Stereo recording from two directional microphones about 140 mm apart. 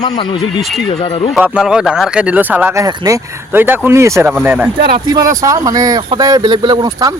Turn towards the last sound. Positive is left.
turn(degrees=-25)  # may be behind; listen again after turning